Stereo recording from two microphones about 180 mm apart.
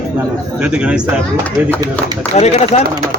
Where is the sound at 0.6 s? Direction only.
5° right (ahead or behind).